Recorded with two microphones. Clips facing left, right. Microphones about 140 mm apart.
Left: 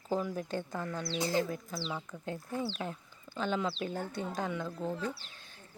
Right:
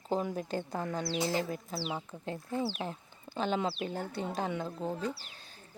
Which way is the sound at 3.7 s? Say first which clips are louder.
Even; 10° right (ahead or behind).